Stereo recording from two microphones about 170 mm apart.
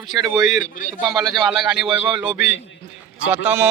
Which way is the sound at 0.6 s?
55° left (ahead or behind).